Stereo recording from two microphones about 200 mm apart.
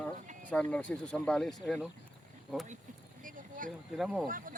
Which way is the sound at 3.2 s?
40° right (ahead or behind).